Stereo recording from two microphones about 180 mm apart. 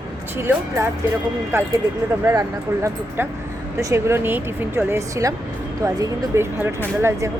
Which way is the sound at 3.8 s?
15° right (ahead or behind).